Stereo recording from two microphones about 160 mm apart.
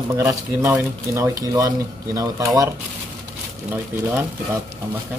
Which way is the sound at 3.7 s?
10° right (ahead or behind).